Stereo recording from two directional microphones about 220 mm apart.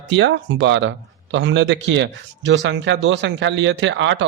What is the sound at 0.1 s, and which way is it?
Speech, 55° right (ahead or behind).